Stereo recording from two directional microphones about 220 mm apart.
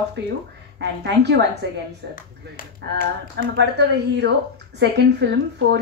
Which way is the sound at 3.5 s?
50° right (ahead or behind).